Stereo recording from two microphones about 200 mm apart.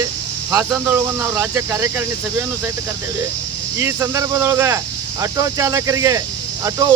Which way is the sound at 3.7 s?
15° right (ahead or behind).